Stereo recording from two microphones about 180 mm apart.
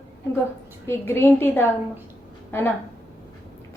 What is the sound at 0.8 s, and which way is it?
A woman's voice, 15° left (ahead or behind).